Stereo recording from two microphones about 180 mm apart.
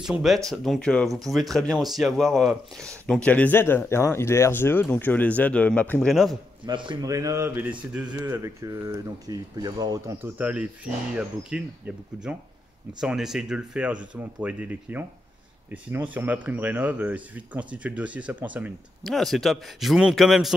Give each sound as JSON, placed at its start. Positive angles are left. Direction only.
{"t": 0.0, "sound": "speech", "side_deg": 0}
{"t": 6.6, "sound": "a man's voice", "side_deg": -25}
{"t": 13.0, "sound": "speech", "side_deg": -5}
{"t": 19.0, "sound": "speech", "side_deg": 0}